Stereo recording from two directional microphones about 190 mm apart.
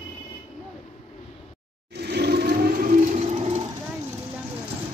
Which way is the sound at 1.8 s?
60° right (ahead or behind).